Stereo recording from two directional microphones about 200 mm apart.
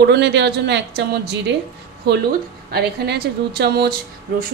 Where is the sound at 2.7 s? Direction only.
55° right (ahead or behind).